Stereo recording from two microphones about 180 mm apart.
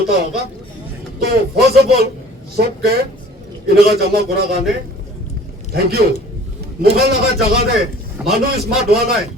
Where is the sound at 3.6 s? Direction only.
60° right (ahead or behind).